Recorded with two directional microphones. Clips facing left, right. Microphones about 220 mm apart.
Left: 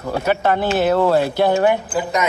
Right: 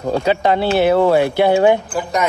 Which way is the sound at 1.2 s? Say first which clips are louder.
Right 2 dB; 55° right (ahead or behind).